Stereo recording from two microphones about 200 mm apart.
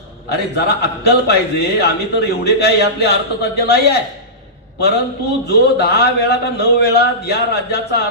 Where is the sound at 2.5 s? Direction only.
55° left (ahead or behind).